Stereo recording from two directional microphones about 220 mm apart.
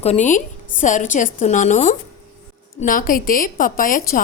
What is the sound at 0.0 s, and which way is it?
A woman's voice, 30° left (ahead or behind).